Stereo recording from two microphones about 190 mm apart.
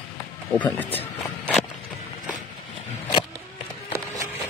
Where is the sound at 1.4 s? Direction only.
5° left (ahead or behind).